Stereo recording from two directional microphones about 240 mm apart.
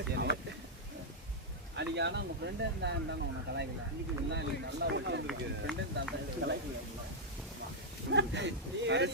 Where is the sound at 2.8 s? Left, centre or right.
Right.